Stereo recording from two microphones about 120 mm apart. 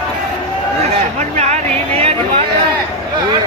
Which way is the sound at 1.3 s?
70° right (ahead or behind).